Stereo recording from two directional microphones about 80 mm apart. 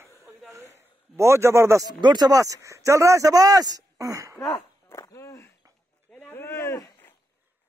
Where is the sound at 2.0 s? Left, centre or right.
Right.